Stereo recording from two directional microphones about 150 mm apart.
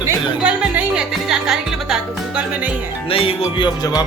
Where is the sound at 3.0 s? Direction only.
40° left (ahead or behind).